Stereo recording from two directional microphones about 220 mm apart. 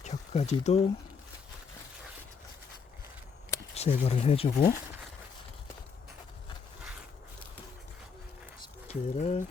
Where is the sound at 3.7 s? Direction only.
30° left (ahead or behind).